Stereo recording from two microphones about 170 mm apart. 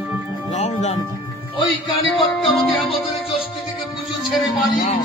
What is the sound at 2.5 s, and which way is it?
Music, centre (ahead or behind).